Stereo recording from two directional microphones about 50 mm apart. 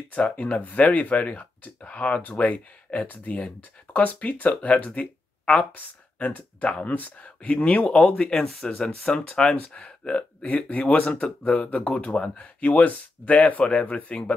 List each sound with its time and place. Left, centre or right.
0.1 s speech: left
8.2 s speech: centre